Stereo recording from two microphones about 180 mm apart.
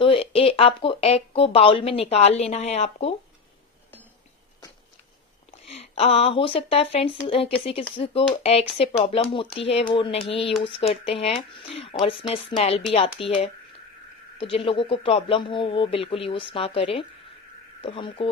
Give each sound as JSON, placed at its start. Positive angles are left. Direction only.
{"t": 0.0, "sound": "speech", "side_deg": 30}
{"t": 5.5, "sound": "a man's voice", "side_deg": 35}